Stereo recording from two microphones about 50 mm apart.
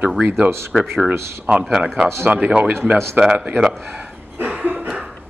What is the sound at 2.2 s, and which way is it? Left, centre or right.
Speech, right.